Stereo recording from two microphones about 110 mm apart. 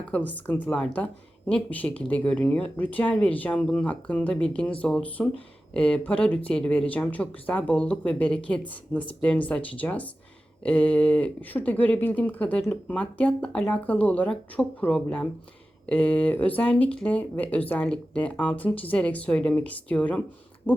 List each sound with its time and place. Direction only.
0.1 s speech: 15° left (ahead or behind)
20.7 s owl: 15° left (ahead or behind)